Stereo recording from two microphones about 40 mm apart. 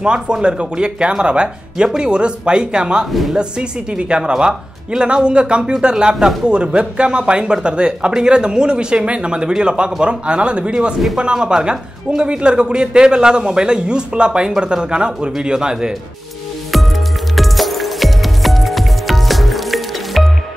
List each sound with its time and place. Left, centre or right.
0.0 s a man's voice: right
3.1 s speech: centre
3.3 s a man's voice: right
17.4 s music: centre